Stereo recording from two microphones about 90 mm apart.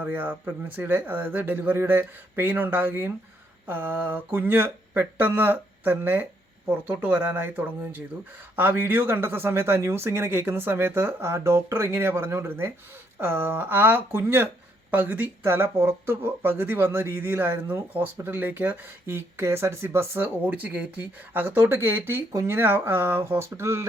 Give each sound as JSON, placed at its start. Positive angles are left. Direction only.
{"t": 0.0, "sound": "speech", "side_deg": -20}
{"t": 22.3, "sound": "speech", "side_deg": -35}
{"t": 22.5, "sound": "speech", "side_deg": -20}